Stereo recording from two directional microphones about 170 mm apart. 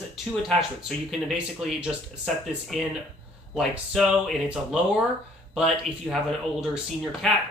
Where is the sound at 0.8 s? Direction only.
Centre (ahead or behind).